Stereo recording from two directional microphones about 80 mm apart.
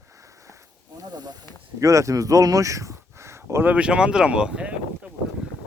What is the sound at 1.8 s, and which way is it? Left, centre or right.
Speech, right.